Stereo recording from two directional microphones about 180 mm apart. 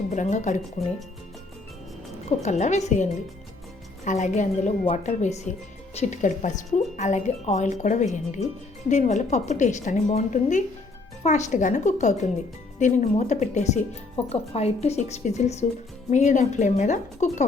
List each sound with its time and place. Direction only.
0.1 s speech: 40° left (ahead or behind)
2.4 s a woman's voice: 40° left (ahead or behind)